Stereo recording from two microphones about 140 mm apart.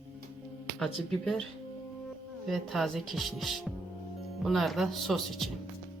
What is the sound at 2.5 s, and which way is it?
Speech, centre (ahead or behind).